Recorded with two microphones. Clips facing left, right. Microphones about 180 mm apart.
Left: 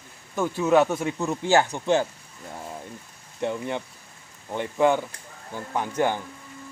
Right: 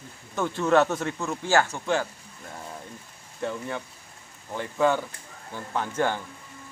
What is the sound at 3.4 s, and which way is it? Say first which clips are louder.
Speech: left 3 dB; 20° left (ahead or behind).